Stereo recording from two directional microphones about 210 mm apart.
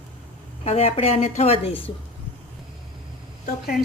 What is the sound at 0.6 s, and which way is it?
A woman's voice, 30° left (ahead or behind).